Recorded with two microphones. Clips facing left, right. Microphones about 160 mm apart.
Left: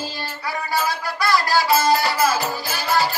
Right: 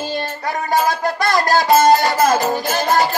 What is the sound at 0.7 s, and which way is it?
Music, 45° right (ahead or behind).